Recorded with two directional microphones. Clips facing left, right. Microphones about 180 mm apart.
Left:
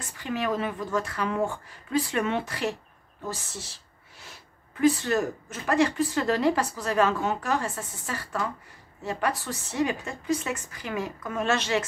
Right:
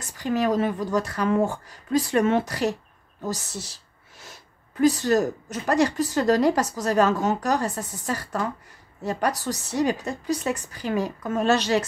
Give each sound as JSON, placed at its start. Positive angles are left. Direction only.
{"t": 0.2, "sound": "a woman's voice", "side_deg": -40}
{"t": 4.7, "sound": "a woman's voice", "side_deg": -40}